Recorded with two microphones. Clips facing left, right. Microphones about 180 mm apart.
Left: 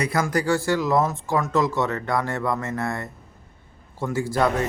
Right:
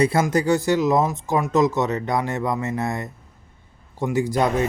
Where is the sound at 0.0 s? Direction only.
25° right (ahead or behind).